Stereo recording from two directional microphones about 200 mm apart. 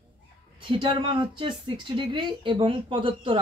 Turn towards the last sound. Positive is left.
turn(degrees=-25)  # may be behind; listen again after turning